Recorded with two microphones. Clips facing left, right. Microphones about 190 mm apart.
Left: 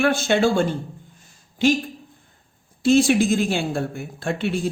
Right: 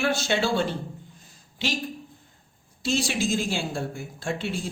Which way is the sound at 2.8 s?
55° left (ahead or behind).